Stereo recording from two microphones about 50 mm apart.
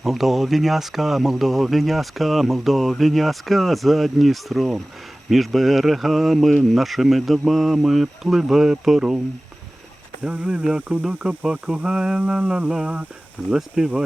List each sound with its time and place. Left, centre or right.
0.0 s speech: centre
10.2 s speech: right
13.5 s speech: centre